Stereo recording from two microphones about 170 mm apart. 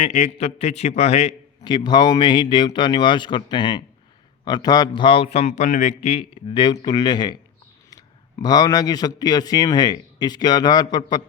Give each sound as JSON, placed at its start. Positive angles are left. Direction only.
{"t": 0.0, "sound": "a man's voice", "side_deg": 40}
{"t": 1.6, "sound": "a man's voice", "side_deg": 25}